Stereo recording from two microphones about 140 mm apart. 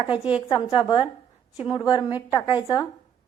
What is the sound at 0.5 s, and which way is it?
Speech, 35° left (ahead or behind).